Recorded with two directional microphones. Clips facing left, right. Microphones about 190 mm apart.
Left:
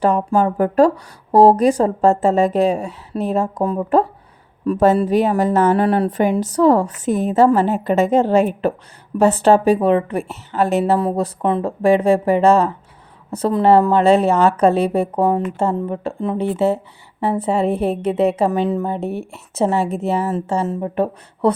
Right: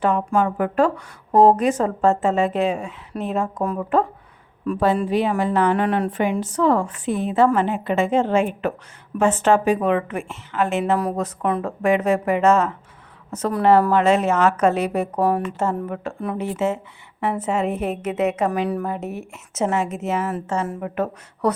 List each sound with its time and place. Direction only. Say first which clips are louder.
0.0 s a woman's voice: left 3 dB; 35° left (ahead or behind)